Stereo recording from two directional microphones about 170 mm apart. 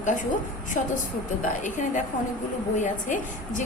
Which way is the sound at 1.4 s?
45° left (ahead or behind).